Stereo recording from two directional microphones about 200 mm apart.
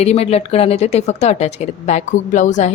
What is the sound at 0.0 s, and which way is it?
A woman's voice, 30° left (ahead or behind).